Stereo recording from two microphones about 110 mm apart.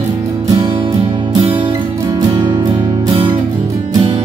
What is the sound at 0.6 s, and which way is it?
Music, 50° right (ahead or behind).